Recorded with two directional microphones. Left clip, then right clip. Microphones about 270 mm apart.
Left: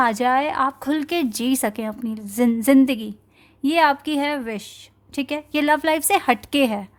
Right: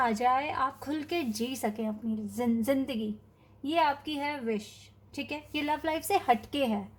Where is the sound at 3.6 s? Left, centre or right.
Left.